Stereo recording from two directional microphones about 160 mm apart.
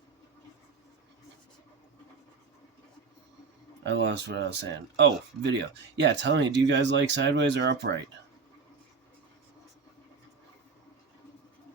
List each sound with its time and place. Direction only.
3.8 s speech: 90° right